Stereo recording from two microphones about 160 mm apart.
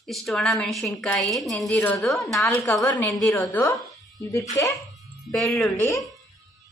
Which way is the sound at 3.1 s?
Centre (ahead or behind).